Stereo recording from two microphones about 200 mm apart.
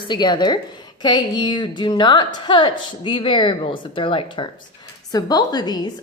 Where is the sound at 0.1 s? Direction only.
20° left (ahead or behind).